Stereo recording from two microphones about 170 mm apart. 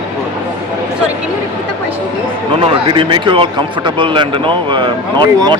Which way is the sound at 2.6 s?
30° right (ahead or behind).